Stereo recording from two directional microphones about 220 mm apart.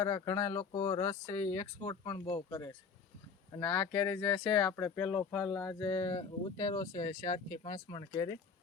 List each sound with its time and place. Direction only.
0.0 s speech: 10° left (ahead or behind)
0.6 s speech: 30° left (ahead or behind)
1.0 s speech: 10° left (ahead or behind)